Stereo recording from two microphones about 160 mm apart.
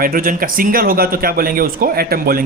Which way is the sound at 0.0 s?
60° right (ahead or behind).